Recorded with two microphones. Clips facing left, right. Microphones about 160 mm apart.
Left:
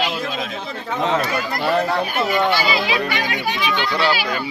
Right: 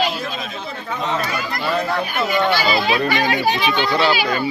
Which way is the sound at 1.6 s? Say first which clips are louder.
Left 3 dB; 40° left (ahead or behind).